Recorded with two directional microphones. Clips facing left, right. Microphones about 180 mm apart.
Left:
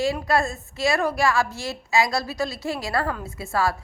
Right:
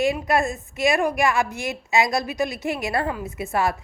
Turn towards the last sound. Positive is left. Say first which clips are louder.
# right 1 dB
turn(degrees=-20)  # may be behind; listen again after turning